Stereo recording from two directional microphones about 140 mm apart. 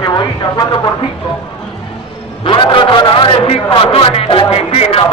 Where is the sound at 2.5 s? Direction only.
35° left (ahead or behind).